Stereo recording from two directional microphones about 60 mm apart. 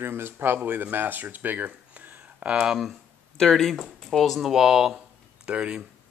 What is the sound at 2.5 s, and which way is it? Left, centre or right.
Speech, centre.